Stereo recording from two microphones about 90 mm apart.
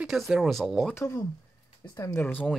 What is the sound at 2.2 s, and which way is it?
Speech, 20° left (ahead or behind).